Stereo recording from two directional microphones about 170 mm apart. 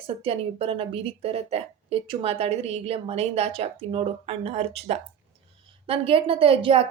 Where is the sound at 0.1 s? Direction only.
35° right (ahead or behind).